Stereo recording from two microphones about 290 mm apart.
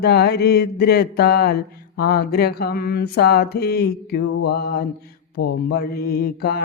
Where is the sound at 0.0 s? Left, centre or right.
Left.